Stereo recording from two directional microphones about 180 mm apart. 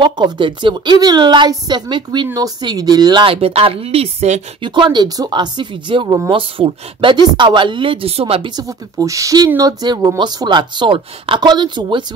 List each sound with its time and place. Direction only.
0.0 s speech: 25° right (ahead or behind)